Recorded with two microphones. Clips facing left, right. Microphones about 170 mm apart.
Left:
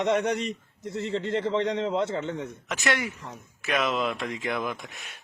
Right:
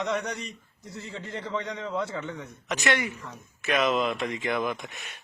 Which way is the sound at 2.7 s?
Centre (ahead or behind).